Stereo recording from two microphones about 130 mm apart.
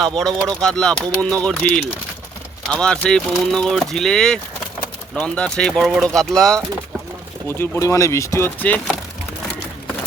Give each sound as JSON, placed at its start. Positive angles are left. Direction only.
{"t": 0.2, "sound": "speech", "side_deg": 5}
{"t": 7.4, "sound": "speech", "side_deg": 20}